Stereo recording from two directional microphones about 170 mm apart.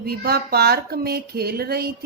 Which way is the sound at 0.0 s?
65° right (ahead or behind).